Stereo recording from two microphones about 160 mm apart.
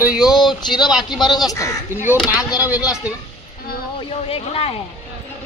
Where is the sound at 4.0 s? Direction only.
35° left (ahead or behind).